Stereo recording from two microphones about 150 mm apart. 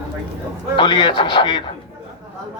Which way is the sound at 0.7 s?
30° left (ahead or behind).